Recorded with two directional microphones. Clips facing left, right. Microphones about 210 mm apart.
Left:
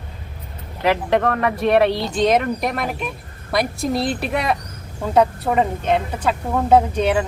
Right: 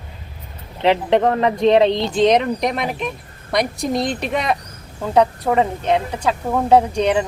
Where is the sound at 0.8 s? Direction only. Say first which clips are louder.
Right 3 dB; 20° right (ahead or behind).